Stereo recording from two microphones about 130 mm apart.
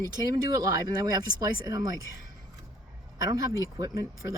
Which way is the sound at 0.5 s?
30° right (ahead or behind).